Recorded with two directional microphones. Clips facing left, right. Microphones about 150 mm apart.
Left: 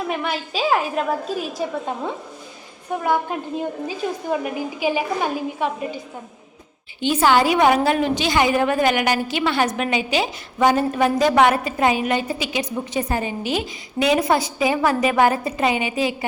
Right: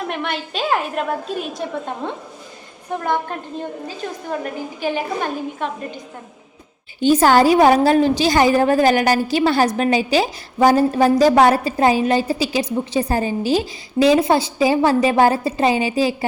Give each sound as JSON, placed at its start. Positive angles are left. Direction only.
{"t": 0.1, "sound": "a woman's voice", "side_deg": 0}
{"t": 3.0, "sound": "a woman's voice", "side_deg": 5}
{"t": 7.0, "sound": "a woman's voice", "side_deg": -40}